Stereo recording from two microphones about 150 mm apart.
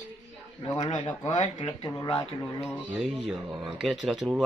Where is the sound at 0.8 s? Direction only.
30° left (ahead or behind).